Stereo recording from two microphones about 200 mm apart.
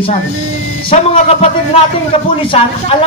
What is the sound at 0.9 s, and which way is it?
Speech, 30° left (ahead or behind).